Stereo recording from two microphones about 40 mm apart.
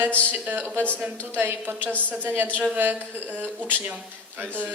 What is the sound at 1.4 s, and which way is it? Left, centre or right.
Speech, right.